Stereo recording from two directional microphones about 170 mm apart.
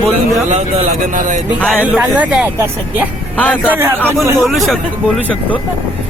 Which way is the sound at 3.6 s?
15° right (ahead or behind).